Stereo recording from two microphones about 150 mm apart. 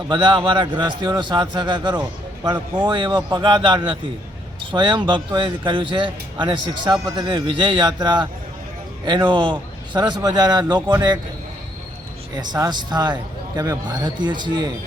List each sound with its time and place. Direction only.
0.1 s a man's voice: 30° right (ahead or behind)
7.2 s a man's voice: 30° right (ahead or behind)
12.4 s a man's voice: 25° right (ahead or behind)